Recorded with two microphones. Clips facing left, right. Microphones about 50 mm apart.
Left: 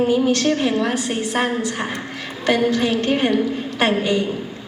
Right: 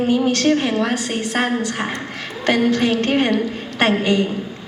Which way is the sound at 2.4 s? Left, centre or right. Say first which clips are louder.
Right 1 dB; right.